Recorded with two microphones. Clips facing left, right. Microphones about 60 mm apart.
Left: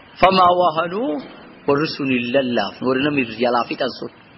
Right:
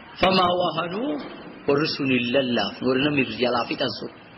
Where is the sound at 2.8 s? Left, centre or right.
Left.